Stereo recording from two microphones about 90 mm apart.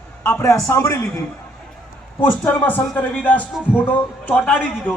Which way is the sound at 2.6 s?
20° left (ahead or behind).